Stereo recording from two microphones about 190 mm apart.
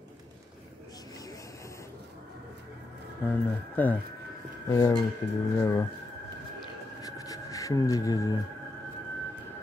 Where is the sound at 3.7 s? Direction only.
10° left (ahead or behind).